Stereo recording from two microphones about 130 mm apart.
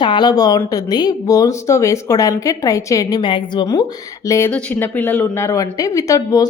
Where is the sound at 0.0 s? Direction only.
35° left (ahead or behind).